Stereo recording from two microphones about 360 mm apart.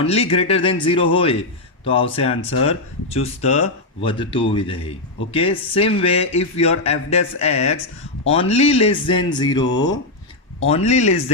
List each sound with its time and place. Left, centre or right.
0.0 s speech: centre